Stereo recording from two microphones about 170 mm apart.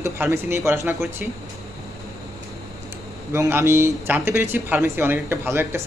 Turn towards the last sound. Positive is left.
turn(degrees=-15)  # may be behind; listen again after turning